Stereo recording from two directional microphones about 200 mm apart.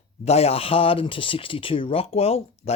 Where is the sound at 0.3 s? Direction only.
30° left (ahead or behind).